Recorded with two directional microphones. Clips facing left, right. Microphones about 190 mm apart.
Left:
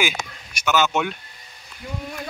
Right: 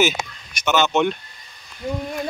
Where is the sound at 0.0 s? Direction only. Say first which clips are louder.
Right 5 dB; 10° left (ahead or behind).